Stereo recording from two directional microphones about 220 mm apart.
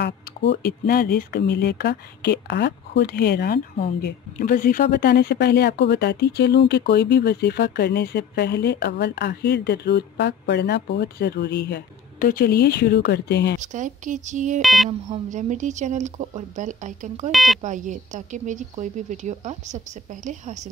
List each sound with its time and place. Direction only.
0.0 s speech: 50° left (ahead or behind)
13.6 s a woman's voice: 35° right (ahead or behind)
14.6 s speech: centre (ahead or behind)
14.9 s a woman's voice: 30° right (ahead or behind)
17.3 s speech: centre (ahead or behind)
17.6 s a woman's voice: 35° right (ahead or behind)